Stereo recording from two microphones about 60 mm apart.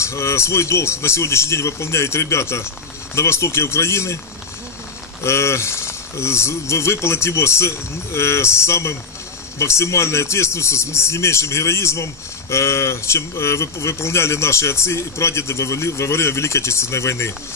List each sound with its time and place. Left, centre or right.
0.0 s speech: left
5.2 s speech: left